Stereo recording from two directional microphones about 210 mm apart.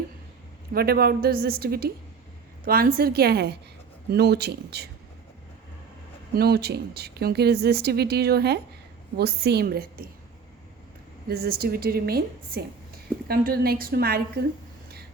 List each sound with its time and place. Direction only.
0.7 s a woman's voice: 45° right (ahead or behind)
6.3 s a woman's voice: 50° right (ahead or behind)
11.3 s a woman's voice: 50° right (ahead or behind)